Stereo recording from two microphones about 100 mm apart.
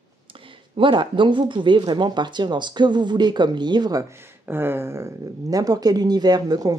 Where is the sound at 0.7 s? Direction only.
55° right (ahead or behind).